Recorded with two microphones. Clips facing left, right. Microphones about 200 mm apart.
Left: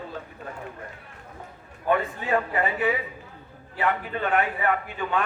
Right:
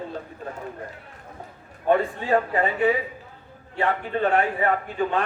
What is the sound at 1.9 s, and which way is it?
A man's voice, 35° right (ahead or behind).